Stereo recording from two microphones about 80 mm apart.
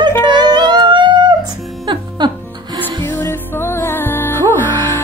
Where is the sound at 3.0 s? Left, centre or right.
Left.